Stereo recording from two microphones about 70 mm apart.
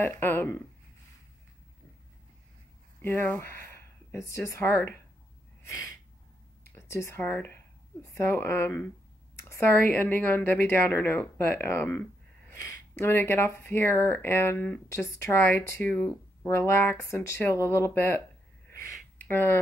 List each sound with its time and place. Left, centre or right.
0.0 s speech: left
3.0 s speech: left
6.6 s a sound: left
7.2 s speech: left
8.1 s speech: left
8.4 s speech: left
12.9 s speech: left
15.9 s speech: centre
16.4 s speech: left
17.0 s speech: left
19.2 s speech: left